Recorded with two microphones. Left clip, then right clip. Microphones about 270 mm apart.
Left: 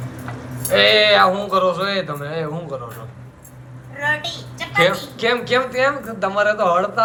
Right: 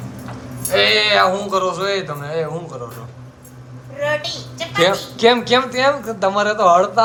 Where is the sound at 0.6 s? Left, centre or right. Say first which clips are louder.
Left 1 dB; centre.